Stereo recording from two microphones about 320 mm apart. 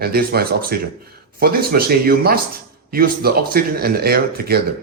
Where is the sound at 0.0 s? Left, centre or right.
Right.